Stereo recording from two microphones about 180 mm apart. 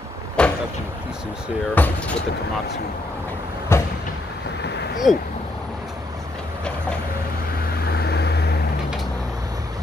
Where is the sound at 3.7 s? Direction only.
15° left (ahead or behind).